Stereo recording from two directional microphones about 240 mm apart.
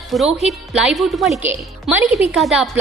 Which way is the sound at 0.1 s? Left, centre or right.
Centre.